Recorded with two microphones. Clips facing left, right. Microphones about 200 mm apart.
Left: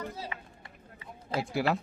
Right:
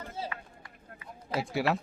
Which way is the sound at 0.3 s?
20° left (ahead or behind).